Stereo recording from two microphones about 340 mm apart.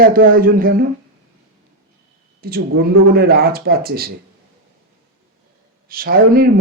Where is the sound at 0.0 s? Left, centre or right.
Right.